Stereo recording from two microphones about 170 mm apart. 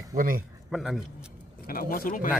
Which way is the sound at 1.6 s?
60° left (ahead or behind).